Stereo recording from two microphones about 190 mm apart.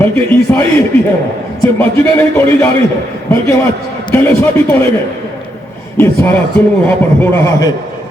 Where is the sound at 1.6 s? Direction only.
10° left (ahead or behind).